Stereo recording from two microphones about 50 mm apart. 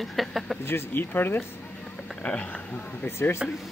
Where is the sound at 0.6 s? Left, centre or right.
Left.